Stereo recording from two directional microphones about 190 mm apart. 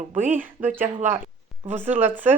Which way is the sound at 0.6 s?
40° right (ahead or behind).